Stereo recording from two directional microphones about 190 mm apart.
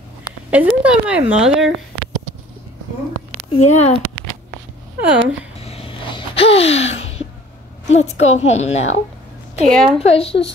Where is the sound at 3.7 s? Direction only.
35° left (ahead or behind).